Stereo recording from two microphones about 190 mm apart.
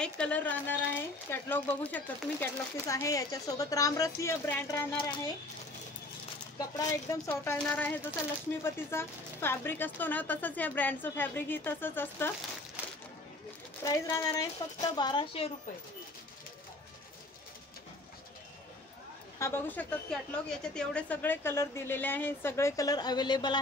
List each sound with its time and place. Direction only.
0.0 s speech: 5° left (ahead or behind)
4.9 s speech: 25° left (ahead or behind)
6.9 s speech: 15° left (ahead or behind)
13.8 s speech: 15° left (ahead or behind)
19.3 s speech: 15° left (ahead or behind)